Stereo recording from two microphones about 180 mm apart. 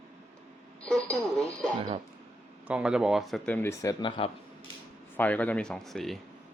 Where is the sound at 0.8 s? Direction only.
5° left (ahead or behind).